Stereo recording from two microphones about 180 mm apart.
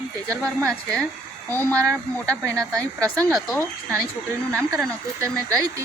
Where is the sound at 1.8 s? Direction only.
15° right (ahead or behind).